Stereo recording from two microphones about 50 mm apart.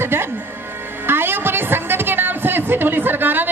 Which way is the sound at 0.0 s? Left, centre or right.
Right.